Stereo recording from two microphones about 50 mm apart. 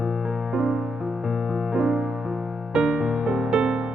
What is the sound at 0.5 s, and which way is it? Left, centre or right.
Music, centre.